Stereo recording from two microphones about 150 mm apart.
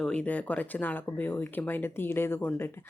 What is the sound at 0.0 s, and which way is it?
A woman's voice, 5° left (ahead or behind).